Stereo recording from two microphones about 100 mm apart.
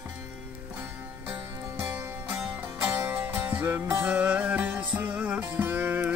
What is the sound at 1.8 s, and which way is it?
Music, 20° right (ahead or behind).